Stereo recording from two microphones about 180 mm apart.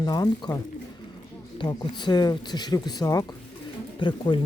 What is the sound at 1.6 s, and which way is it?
Speech, 25° left (ahead or behind).